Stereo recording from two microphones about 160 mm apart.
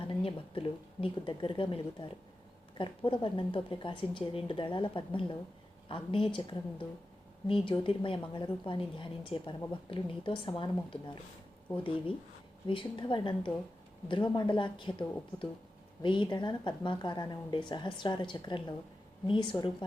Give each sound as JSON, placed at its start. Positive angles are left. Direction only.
{"t": 0.1, "sound": "a woman's voice", "side_deg": 35}
{"t": 11.8, "sound": "a woman's voice", "side_deg": 35}